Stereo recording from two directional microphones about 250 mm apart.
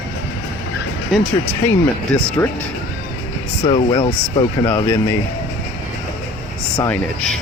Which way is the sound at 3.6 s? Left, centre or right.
Left.